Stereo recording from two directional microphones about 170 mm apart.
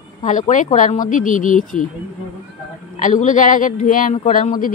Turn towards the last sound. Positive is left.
turn(degrees=50)  # may be behind; listen again after turning